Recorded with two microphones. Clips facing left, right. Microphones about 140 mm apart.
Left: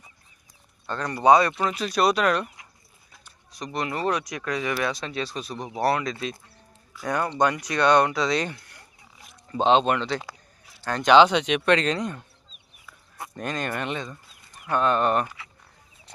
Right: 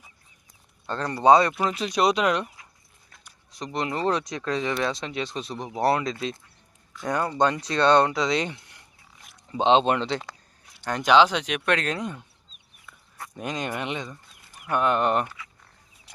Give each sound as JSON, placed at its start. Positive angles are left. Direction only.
{"t": 0.9, "sound": "speech", "side_deg": -30}
{"t": 3.5, "sound": "speech", "side_deg": -25}
{"t": 9.7, "sound": "speech", "side_deg": -30}
{"t": 11.0, "sound": "speech", "side_deg": 0}
{"t": 13.3, "sound": "speech", "side_deg": -15}